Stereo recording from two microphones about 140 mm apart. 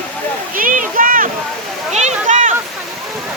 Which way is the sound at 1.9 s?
55° right (ahead or behind).